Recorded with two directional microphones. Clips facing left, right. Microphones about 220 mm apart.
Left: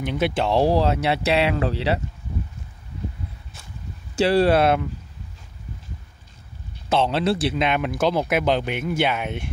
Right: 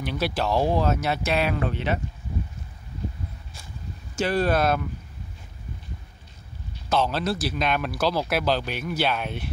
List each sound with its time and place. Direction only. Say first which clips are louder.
0.0 s speech: left 4 dB; 20° left (ahead or behind)
4.1 s speech: left 6 dB; 30° left (ahead or behind)
6.9 s speech: left 4 dB; 25° left (ahead or behind)